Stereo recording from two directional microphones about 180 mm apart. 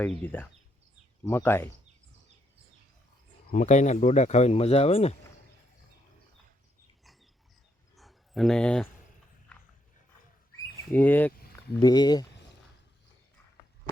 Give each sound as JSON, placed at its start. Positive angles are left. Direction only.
{"t": 0.0, "sound": "speech", "side_deg": 10}
{"t": 3.5, "sound": "speech", "side_deg": 40}
{"t": 7.9, "sound": "a sound", "side_deg": 0}
{"t": 9.5, "sound": "dog", "side_deg": 5}
{"t": 10.9, "sound": "speech", "side_deg": 10}
{"t": 11.8, "sound": "speech", "side_deg": 20}